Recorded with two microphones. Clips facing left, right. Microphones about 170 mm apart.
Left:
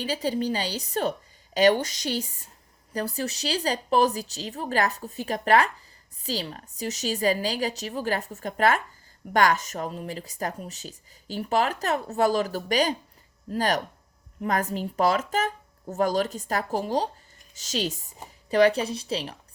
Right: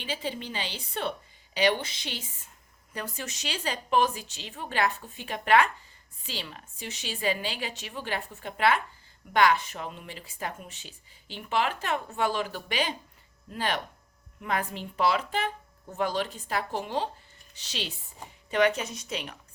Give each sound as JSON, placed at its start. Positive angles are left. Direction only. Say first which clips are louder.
{"t": 0.0, "sound": "speech", "louder": "left 8 dB", "side_deg": 40}